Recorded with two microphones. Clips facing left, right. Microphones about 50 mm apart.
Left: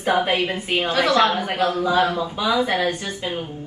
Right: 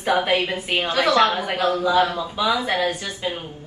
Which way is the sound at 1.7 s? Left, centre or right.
Left.